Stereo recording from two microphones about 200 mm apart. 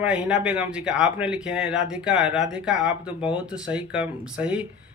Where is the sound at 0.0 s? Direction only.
5° right (ahead or behind).